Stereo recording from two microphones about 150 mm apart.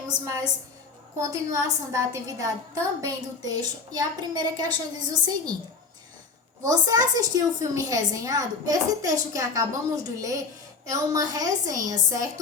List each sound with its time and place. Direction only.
1.2 s a woman's voice: 20° right (ahead or behind)
6.6 s a woman's voice: 25° right (ahead or behind)